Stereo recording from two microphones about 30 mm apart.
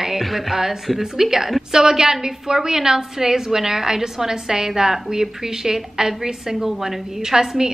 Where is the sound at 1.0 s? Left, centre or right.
Centre.